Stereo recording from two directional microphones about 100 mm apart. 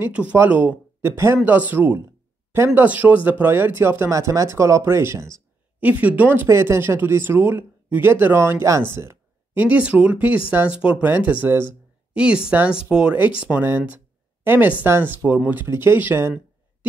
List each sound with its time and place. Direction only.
0.0 s speech: 15° right (ahead or behind)
5.8 s speech: 15° right (ahead or behind)
6.4 s speech: 30° right (ahead or behind)